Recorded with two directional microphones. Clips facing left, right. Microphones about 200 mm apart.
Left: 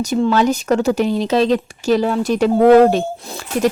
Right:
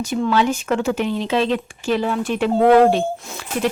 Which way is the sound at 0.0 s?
40° left (ahead or behind).